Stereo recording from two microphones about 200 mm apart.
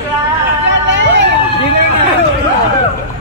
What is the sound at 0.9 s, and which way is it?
Hubbub, 65° right (ahead or behind).